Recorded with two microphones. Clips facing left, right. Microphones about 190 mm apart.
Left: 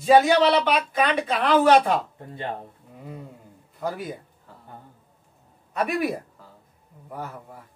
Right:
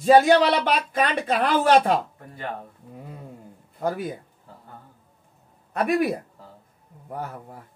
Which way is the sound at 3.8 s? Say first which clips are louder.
Right 3 dB; 50° right (ahead or behind).